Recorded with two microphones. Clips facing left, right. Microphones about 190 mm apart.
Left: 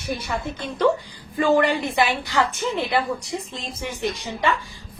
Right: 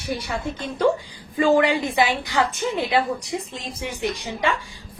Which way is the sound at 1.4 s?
15° right (ahead or behind).